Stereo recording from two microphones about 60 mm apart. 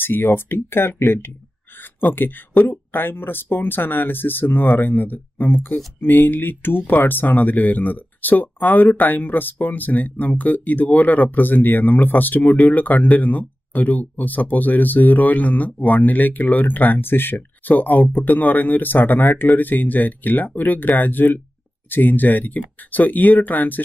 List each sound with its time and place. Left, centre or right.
0.0 s speech: left